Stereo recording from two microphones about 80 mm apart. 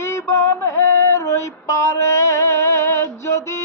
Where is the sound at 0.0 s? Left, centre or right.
Left.